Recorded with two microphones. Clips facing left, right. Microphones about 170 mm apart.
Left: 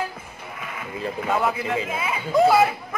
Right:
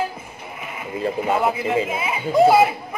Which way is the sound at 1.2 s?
20° right (ahead or behind).